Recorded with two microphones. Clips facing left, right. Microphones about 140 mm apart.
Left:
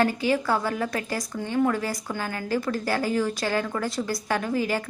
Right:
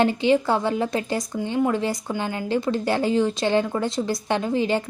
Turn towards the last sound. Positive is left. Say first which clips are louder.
# right 3 dB
turn(degrees=-25)  # may be behind; listen again after turning